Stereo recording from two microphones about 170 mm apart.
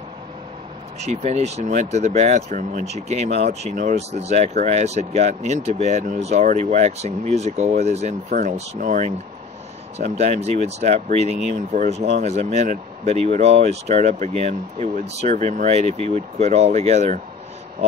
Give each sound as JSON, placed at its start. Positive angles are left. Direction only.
{"t": 1.0, "sound": "speech", "side_deg": -40}